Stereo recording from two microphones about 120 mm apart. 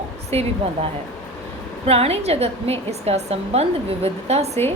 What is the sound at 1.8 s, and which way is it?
A woman's voice, 55° right (ahead or behind).